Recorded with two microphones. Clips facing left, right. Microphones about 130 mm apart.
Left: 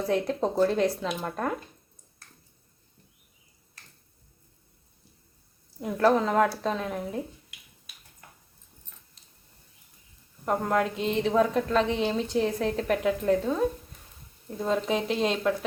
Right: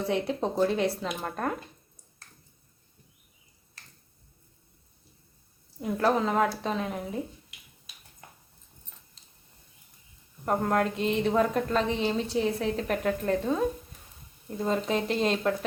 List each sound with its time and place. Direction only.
0.0 s a woman's voice: centre (ahead or behind)
5.8 s a woman's voice: centre (ahead or behind)
8.2 s dog: 25° right (ahead or behind)
10.4 s a woman's voice: centre (ahead or behind)